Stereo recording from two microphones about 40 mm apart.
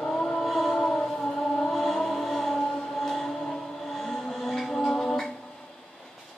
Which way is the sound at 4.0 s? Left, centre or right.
Centre.